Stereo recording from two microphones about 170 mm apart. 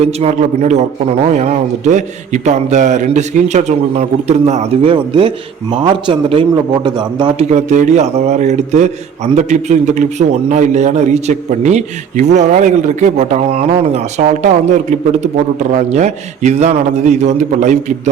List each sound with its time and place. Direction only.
0.0 s a man's voice: 40° right (ahead or behind)
7.5 s a man's voice: 45° right (ahead or behind)